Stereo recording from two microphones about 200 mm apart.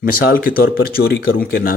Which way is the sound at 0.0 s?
45° left (ahead or behind).